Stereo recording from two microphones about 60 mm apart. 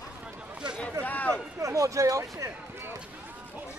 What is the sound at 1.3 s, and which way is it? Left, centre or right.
Speech, right.